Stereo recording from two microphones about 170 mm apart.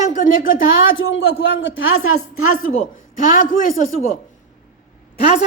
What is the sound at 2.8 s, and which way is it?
A man's voice, 50° left (ahead or behind).